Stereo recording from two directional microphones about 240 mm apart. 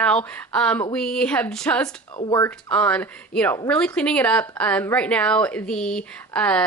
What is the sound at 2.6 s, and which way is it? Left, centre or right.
A woman's voice, centre.